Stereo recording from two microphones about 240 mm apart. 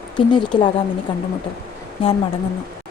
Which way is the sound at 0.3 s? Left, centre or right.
Centre.